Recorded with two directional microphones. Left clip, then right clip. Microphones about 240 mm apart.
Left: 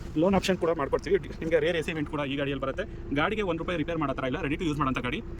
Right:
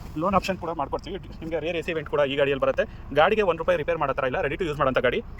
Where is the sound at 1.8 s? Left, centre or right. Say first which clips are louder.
Right 3 dB; centre.